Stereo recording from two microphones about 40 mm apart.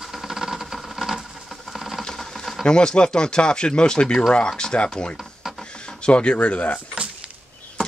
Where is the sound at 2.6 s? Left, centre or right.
Left.